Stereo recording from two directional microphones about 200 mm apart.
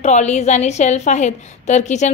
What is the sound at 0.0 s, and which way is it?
A woman's voice, 35° left (ahead or behind).